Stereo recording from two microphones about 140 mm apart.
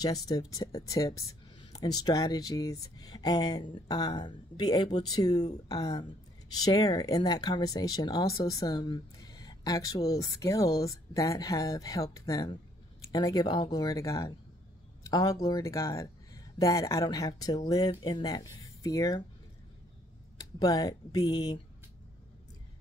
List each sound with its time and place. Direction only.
0.0 s speech: 25° left (ahead or behind)
20.3 s speech: 25° left (ahead or behind)